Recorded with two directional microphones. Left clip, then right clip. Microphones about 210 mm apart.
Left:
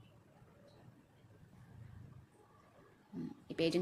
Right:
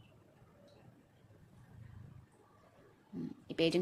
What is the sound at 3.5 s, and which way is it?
Speech, 10° right (ahead or behind).